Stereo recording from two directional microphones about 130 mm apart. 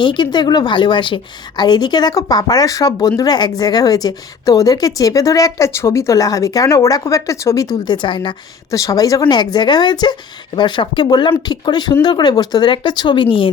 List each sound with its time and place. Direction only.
0.0 s a woman's voice: 35° left (ahead or behind)
8.0 s a woman's voice: 40° left (ahead or behind)
8.7 s a woman's voice: 25° left (ahead or behind); by 13.5 s 40° left (ahead or behind)